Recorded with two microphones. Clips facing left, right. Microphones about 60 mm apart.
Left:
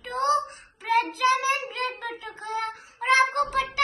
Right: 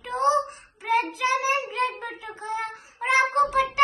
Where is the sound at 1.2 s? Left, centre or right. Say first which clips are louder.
Left 1 dB; right.